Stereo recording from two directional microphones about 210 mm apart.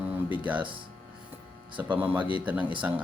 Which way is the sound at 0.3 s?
5° right (ahead or behind).